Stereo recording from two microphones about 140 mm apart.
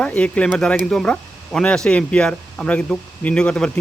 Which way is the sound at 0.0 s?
10° left (ahead or behind).